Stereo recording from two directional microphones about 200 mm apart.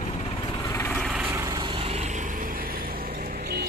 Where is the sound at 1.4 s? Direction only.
20° right (ahead or behind).